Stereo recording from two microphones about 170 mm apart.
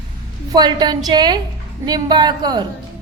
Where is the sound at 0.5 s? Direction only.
25° right (ahead or behind).